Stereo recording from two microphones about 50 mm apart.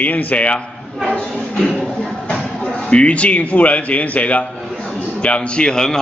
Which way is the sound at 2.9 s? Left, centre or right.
Left.